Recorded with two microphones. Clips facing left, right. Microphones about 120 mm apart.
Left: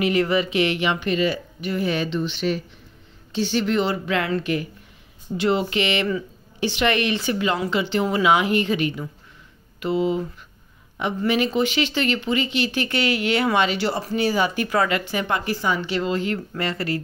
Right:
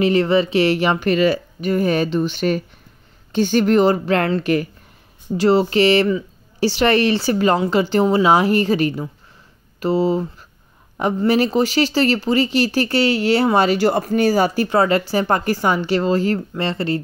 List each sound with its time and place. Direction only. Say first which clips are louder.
0.0 s speech: right 5 dB; 30° right (ahead or behind)
1.1 s speech: right 6 dB; 60° right (ahead or behind)
1.6 s speech: right 5 dB; 45° right (ahead or behind)
4.4 s speech: right 6 dB; 55° right (ahead or behind)
5.4 s speech: right 7 dB; 35° right (ahead or behind)